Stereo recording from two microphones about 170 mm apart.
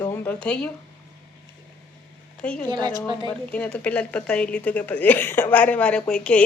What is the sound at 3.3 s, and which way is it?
A woman's voice, 10° left (ahead or behind).